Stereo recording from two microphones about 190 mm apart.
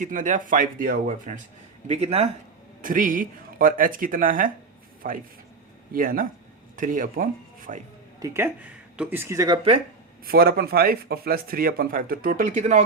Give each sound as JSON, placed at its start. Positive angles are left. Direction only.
{"t": 0.0, "sound": "speech", "side_deg": -45}
{"t": 1.9, "sound": "speech", "side_deg": -35}
{"t": 2.8, "sound": "speech", "side_deg": -45}
{"t": 8.2, "sound": "speech", "side_deg": -15}
{"t": 10.2, "sound": "speech", "side_deg": -50}